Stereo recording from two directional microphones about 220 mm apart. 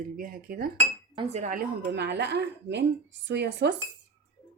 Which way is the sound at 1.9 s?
50° right (ahead or behind).